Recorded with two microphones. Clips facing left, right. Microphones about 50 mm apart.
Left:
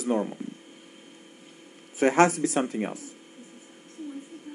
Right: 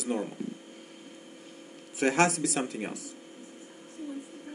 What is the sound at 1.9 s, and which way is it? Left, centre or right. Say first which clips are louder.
Speech: left 5 dB; left.